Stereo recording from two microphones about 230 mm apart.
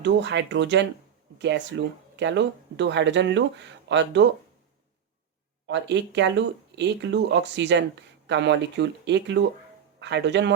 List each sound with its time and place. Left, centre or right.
0.0 s speech: right
5.6 s speech: right